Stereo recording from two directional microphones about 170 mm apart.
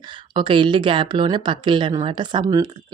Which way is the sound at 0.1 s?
30° right (ahead or behind).